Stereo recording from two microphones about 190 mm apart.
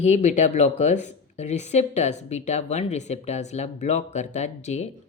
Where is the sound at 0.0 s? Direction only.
35° left (ahead or behind).